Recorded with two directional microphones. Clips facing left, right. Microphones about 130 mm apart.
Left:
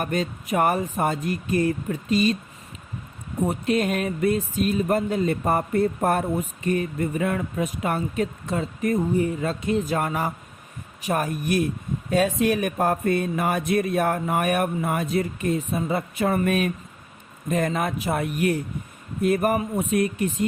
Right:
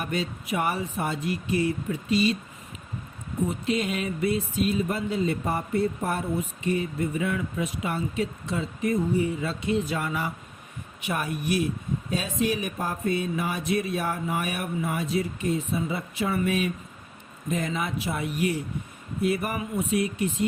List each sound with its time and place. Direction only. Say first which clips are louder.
0.0 s speech: left 4 dB; 45° left (ahead or behind)
3.4 s speech: left 4 dB; 55° left (ahead or behind)